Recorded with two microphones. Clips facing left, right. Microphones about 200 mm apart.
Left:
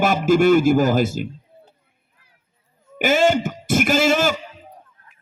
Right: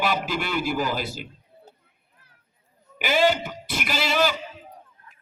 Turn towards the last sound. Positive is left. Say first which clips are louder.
# left 6 dB
turn(degrees=45)  # may be behind; listen again after turning